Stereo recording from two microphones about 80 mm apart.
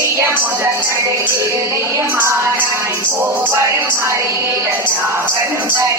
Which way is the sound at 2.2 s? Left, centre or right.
Right.